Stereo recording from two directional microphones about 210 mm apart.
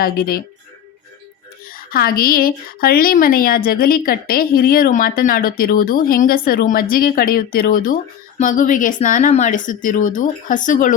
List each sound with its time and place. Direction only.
0.0 s a woman's voice: 45° left (ahead or behind)
1.6 s a woman's voice: 45° left (ahead or behind)